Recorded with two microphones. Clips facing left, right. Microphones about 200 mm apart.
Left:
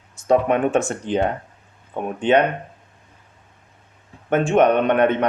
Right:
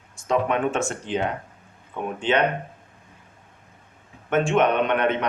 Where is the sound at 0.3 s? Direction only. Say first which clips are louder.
Left 5 dB; 45° left (ahead or behind).